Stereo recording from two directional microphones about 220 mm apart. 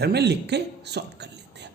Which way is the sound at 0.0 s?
50° right (ahead or behind).